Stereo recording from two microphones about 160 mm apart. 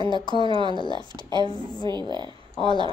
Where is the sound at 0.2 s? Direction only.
30° left (ahead or behind).